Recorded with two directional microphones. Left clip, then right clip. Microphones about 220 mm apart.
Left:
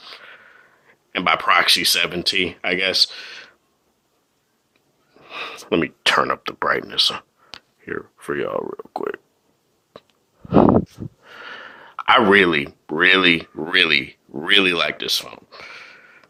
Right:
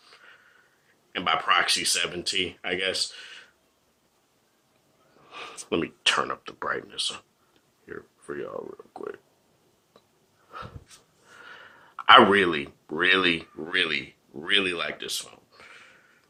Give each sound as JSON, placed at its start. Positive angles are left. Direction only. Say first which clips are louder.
{"t": 0.0, "sound": "a sound", "louder": "left 12 dB", "side_deg": 35}
{"t": 1.1, "sound": "speech", "louder": "left 6 dB", "side_deg": 35}
{"t": 5.3, "sound": "speech", "louder": "left 8 dB", "side_deg": 25}
{"t": 11.3, "sound": "speech", "louder": "left 8 dB", "side_deg": 30}